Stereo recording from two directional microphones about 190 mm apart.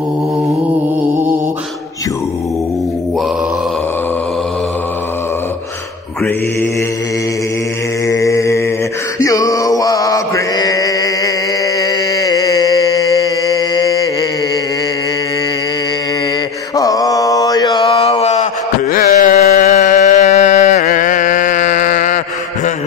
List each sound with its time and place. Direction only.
8.1 s mantra: 15° left (ahead or behind)
9.2 s chant: 20° left (ahead or behind)
16.7 s mantra: 20° left (ahead or behind); by 18.5 s 35° left (ahead or behind)
18.9 s music: 45° left (ahead or behind)